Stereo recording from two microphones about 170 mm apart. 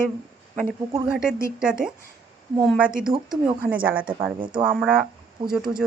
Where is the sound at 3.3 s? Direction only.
10° right (ahead or behind).